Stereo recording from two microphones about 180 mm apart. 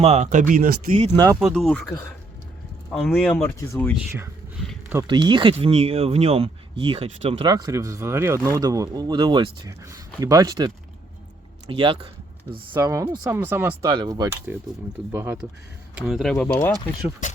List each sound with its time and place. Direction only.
0.0 s speech: 40° right (ahead or behind)
1.1 s speech: 20° right (ahead or behind)
1.4 s speech: centre (ahead or behind)
2.9 s speech: centre (ahead or behind)
3.9 s speech: 15° right (ahead or behind)
5.0 s speech: 25° right (ahead or behind)
11.7 s speech: 30° right (ahead or behind)
12.5 s speech: 15° right (ahead or behind)
16.0 s speech: centre (ahead or behind)
16.3 s speech: 10° left (ahead or behind)